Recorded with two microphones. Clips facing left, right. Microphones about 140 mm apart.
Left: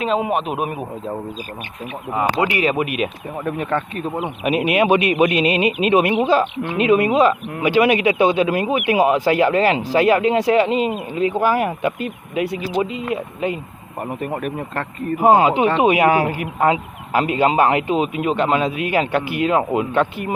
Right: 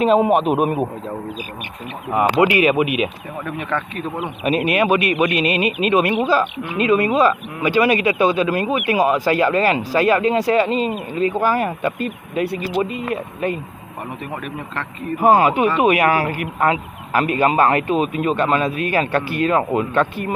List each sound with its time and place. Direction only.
0.0 s a man's voice: 40° right (ahead or behind)
2.1 s speech: 15° right (ahead or behind)
3.4 s speech: 35° left (ahead or behind)
4.4 s speech: 15° left (ahead or behind)
14.2 s speech: 50° left (ahead or behind)
15.2 s speech: 20° left (ahead or behind)